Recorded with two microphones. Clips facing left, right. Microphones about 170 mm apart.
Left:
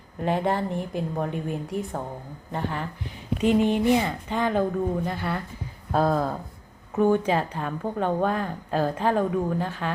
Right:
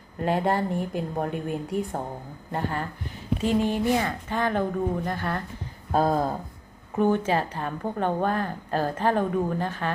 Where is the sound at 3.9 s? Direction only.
15° left (ahead or behind).